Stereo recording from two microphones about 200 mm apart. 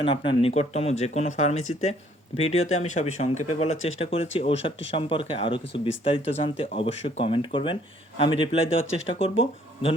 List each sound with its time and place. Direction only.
0.0 s speech: 25° left (ahead or behind)